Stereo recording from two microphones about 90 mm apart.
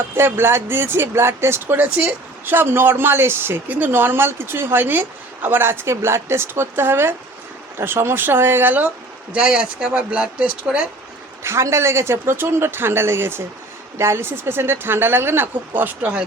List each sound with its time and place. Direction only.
0.2 s speech: 25° right (ahead or behind)
11.4 s speech: 30° right (ahead or behind)